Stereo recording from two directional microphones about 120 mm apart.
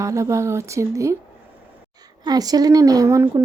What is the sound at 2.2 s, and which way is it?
A woman's voice, 35° right (ahead or behind).